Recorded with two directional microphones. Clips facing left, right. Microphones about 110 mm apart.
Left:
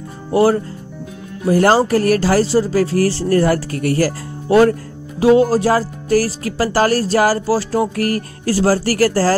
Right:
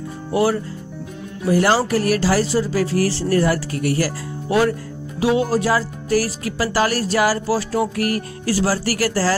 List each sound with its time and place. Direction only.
0.3 s speech: 40° left (ahead or behind)